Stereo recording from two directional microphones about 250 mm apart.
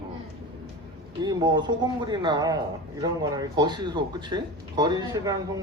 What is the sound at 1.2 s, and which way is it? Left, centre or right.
A man's voice, centre.